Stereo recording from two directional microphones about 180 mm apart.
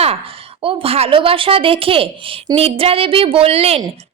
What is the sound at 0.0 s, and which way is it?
A woman's voice, 30° right (ahead or behind).